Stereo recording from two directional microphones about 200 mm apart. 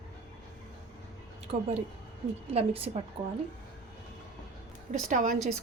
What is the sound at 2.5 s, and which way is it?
Speech, 30° right (ahead or behind).